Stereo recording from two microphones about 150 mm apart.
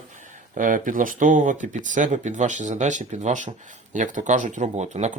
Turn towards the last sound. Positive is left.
turn(degrees=-50)  # may be behind; listen again after turning